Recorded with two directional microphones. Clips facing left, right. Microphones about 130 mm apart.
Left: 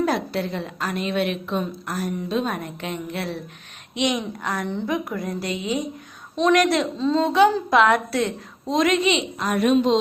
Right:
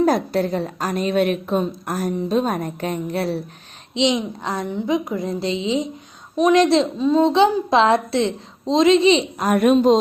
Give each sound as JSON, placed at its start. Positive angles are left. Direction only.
{"t": 0.0, "sound": "a woman's voice", "side_deg": -40}
{"t": 3.9, "sound": "a woman's voice", "side_deg": -25}
{"t": 6.9, "sound": "speech", "side_deg": -15}
{"t": 7.3, "sound": "a woman's voice", "side_deg": -25}
{"t": 9.4, "sound": "a woman's voice", "side_deg": -50}